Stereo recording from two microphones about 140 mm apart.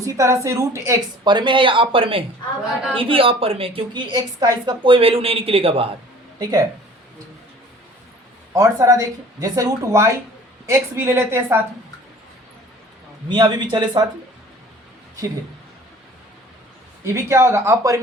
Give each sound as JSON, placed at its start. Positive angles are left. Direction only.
{"t": 0.0, "sound": "speech", "side_deg": -20}
{"t": 1.2, "sound": "a woman's voice", "side_deg": -35}
{"t": 6.4, "sound": "speech", "side_deg": -25}
{"t": 8.5, "sound": "a woman's voice", "side_deg": -20}
{"t": 13.2, "sound": "a woman's voice", "side_deg": -35}
{"t": 17.1, "sound": "speech", "side_deg": -20}